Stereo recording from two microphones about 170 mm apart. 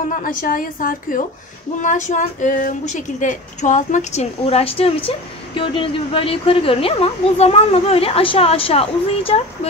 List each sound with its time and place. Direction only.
0.1 s a woman's voice: 55° left (ahead or behind); by 9.4 s 35° left (ahead or behind)